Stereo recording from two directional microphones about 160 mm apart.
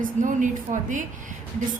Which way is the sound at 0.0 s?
55° right (ahead or behind).